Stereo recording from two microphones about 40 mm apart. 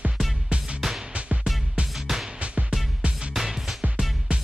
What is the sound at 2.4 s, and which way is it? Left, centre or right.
Music, right.